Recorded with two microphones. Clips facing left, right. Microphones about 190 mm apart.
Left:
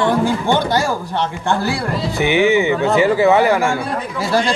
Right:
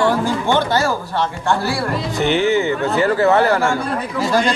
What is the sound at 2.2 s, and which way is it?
Speech, 15° left (ahead or behind).